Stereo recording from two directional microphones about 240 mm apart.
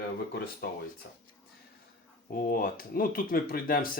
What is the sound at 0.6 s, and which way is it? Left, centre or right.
Speech, left.